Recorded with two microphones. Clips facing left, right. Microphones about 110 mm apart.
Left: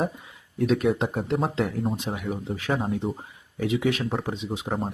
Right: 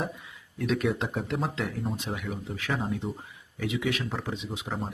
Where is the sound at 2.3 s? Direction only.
30° left (ahead or behind).